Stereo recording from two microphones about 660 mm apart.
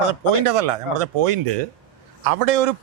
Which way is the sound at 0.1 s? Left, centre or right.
Right.